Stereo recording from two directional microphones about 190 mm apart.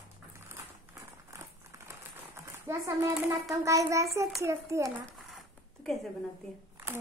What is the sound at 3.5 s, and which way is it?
Child singing, 15° right (ahead or behind).